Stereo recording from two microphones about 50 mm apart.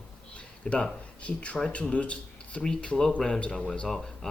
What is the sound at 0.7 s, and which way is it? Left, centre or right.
Speech, left.